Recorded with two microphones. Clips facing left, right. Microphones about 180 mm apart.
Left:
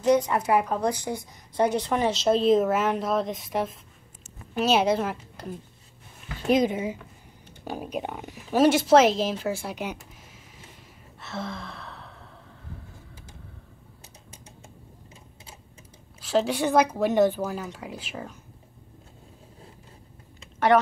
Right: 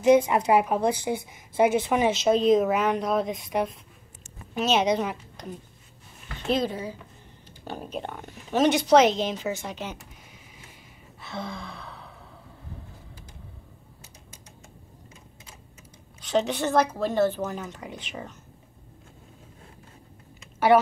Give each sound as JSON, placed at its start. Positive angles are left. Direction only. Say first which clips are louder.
{"t": 0.0, "sound": "a woman's voice", "louder": "right 3 dB", "side_deg": -10}
{"t": 1.5, "sound": "a woman's voice", "louder": "right 2 dB", "side_deg": -5}
{"t": 7.6, "sound": "speech", "louder": "left 2 dB", "side_deg": 10}
{"t": 10.6, "sound": "gasp", "louder": "left 1 dB", "side_deg": 0}
{"t": 16.2, "sound": "speech", "louder": "left 1 dB", "side_deg": 5}
{"t": 20.5, "sound": "typing", "louder": "right 1 dB", "side_deg": -5}